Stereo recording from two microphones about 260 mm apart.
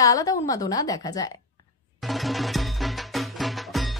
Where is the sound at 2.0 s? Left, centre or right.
Centre.